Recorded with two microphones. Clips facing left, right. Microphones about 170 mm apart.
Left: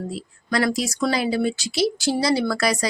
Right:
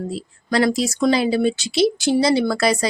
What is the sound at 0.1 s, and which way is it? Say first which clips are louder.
Speech: right 3 dB; 25° right (ahead or behind).